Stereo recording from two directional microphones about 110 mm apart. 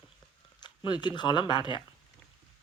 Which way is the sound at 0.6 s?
45° left (ahead or behind).